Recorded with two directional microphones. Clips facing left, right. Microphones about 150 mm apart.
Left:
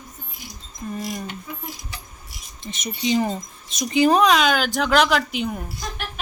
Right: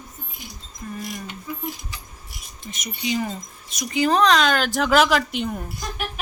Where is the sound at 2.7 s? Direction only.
30° left (ahead or behind).